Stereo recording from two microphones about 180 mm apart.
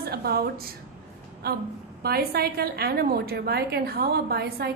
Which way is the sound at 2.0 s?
60° right (ahead or behind).